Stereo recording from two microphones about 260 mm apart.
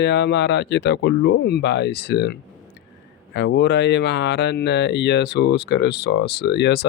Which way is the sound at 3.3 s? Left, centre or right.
Left.